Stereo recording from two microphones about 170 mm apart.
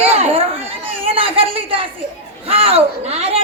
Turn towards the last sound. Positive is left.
turn(degrees=-35)  # may be behind; listen again after turning